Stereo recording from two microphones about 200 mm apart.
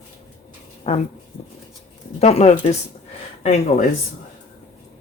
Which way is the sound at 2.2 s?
35° left (ahead or behind).